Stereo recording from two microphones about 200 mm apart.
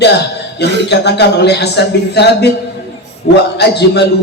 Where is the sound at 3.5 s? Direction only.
55° left (ahead or behind).